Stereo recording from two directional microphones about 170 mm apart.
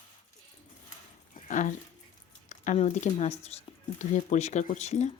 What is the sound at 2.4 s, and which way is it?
Speech, 45° left (ahead or behind).